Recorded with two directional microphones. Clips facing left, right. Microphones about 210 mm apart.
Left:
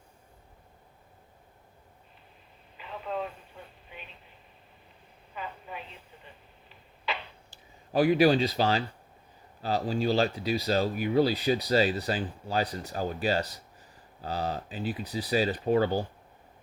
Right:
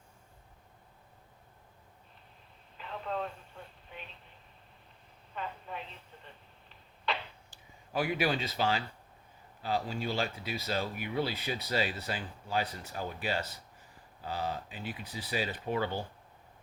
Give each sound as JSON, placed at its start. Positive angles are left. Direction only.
{"t": 2.7, "sound": "vehicle", "side_deg": 5}
{"t": 5.3, "sound": "telephone", "side_deg": 5}
{"t": 7.1, "sound": "a sound", "side_deg": 0}
{"t": 7.9, "sound": "speech", "side_deg": 35}